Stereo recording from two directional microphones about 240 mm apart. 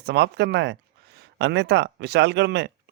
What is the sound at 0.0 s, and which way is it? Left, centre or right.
Speech, right.